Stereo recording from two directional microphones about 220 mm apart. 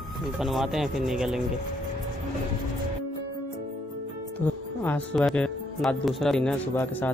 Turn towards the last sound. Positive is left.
turn(degrees=5)  # may be behind; listen again after turning